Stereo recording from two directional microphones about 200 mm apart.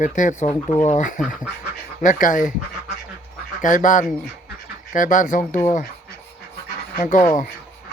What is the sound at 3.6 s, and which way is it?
Speech, 40° left (ahead or behind).